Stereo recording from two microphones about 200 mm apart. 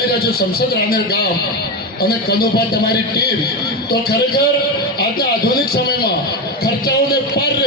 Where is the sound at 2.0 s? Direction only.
50° left (ahead or behind).